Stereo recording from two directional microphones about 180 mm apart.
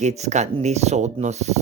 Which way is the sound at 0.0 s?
40° right (ahead or behind).